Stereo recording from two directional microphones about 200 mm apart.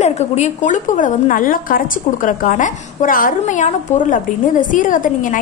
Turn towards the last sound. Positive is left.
turn(degrees=40)  # may be behind; listen again after turning